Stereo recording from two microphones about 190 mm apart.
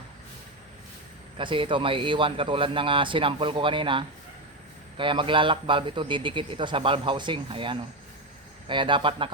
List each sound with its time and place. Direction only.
1.4 s a man's voice: 25° right (ahead or behind)